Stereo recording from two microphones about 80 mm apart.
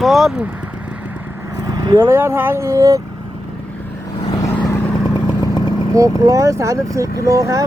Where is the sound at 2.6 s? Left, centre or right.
Right.